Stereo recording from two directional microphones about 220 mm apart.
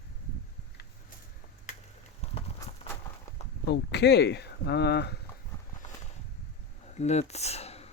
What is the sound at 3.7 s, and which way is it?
Speech, 50° left (ahead or behind).